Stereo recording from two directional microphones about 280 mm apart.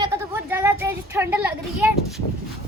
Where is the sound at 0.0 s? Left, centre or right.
Centre.